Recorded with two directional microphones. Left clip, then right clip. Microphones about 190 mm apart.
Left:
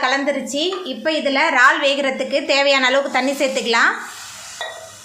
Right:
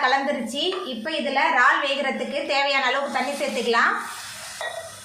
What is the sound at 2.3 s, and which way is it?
A woman's voice, 50° left (ahead or behind).